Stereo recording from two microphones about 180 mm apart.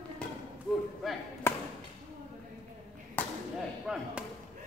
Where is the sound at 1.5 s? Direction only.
10° left (ahead or behind).